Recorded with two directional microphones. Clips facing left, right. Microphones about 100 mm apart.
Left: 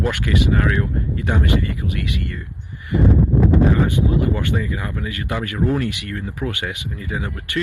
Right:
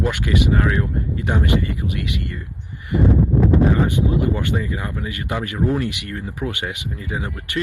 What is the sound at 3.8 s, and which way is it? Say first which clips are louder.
Speech: even; 25° right (ahead or behind).